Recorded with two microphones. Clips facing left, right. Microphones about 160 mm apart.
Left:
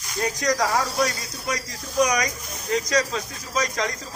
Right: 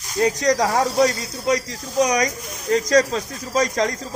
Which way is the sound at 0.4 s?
35° right (ahead or behind).